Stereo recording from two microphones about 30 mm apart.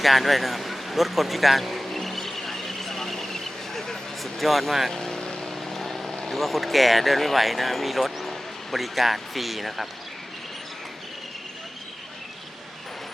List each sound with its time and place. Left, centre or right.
0.0 s a sound: centre
4.2 s speech: centre
4.9 s vehicle: centre
5.7 s vehicle: centre
6.3 s speech: centre